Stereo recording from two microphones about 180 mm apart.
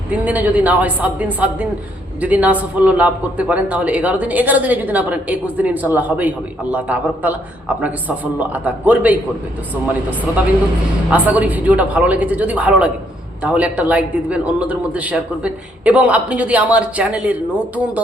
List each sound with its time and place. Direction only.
0.1 s a man's voice: 10° right (ahead or behind)
11.1 s a man's voice: 10° right (ahead or behind)